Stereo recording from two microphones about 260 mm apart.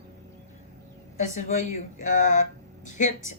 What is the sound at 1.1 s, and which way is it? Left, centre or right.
Speech, left.